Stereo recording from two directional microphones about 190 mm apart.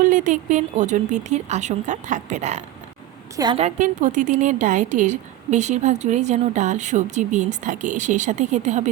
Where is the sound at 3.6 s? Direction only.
40° right (ahead or behind).